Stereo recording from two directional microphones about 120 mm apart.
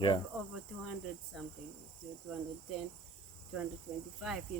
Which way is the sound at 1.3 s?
Centre (ahead or behind).